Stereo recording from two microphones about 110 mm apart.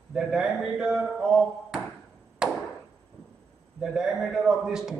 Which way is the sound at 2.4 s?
5° right (ahead or behind).